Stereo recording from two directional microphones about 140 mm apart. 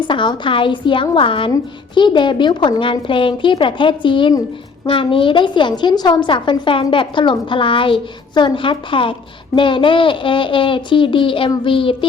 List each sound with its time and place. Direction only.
0.0 s a woman's voice: 35° left (ahead or behind)